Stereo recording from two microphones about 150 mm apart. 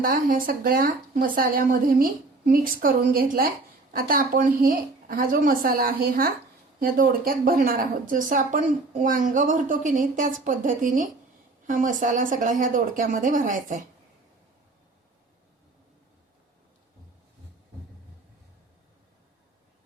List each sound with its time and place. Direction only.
0.0 s a woman's voice: 70° right (ahead or behind)